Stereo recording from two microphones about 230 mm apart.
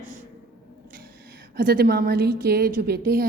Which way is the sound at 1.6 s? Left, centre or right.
Right.